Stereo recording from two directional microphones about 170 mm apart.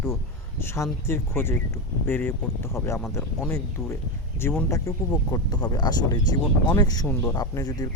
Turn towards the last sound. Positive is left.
turn(degrees=20)  # may be behind; listen again after turning